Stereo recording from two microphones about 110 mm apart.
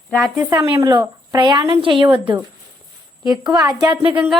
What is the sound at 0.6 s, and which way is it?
Speech, 25° right (ahead or behind).